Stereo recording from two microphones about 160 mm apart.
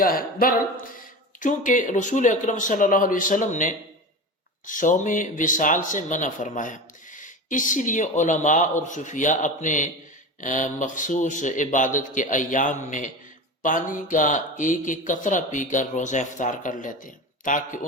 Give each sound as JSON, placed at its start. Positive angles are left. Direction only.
{"t": 0.0, "sound": "speech", "side_deg": 65}